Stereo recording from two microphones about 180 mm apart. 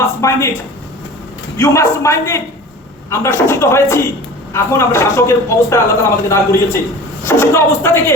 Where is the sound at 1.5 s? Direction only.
15° left (ahead or behind).